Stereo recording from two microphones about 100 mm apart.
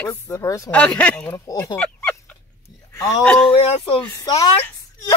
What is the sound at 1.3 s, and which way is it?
Speech, 30° left (ahead or behind).